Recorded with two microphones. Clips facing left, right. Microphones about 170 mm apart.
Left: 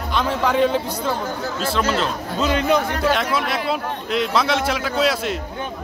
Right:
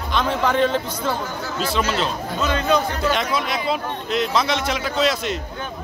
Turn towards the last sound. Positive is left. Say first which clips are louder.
# left 1 dB
turn(degrees=5)  # may be behind; listen again after turning